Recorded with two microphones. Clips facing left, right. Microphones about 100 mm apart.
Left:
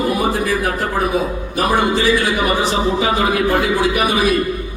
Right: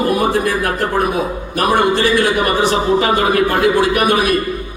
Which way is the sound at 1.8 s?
60° right (ahead or behind).